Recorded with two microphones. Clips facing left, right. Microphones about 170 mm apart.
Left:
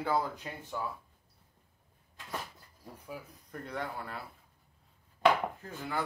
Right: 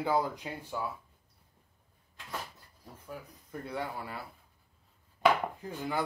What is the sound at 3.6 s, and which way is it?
Speech, 10° right (ahead or behind).